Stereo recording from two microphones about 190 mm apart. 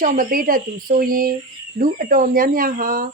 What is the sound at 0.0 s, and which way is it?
Speech, 45° right (ahead or behind).